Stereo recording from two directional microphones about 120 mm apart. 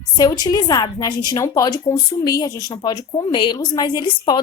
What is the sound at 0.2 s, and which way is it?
A woman's voice, 35° left (ahead or behind).